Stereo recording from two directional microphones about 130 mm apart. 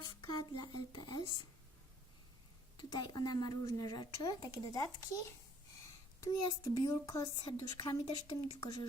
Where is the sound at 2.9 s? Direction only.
30° left (ahead or behind).